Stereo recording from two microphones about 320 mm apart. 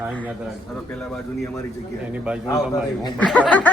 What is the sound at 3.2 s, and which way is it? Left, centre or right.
Speech, centre.